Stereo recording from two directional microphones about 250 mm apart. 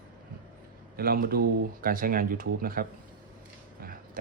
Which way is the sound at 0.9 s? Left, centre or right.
Right.